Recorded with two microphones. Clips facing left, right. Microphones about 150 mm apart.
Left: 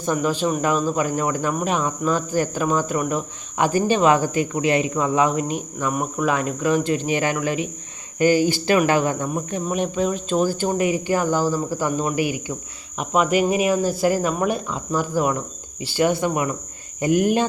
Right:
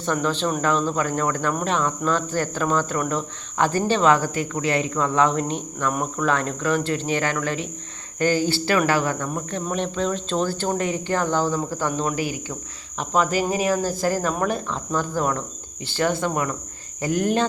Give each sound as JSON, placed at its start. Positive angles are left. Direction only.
{"t": 0.0, "sound": "speech", "side_deg": 10}
{"t": 13.3, "sound": "speech", "side_deg": -35}
{"t": 14.0, "sound": "speech", "side_deg": 10}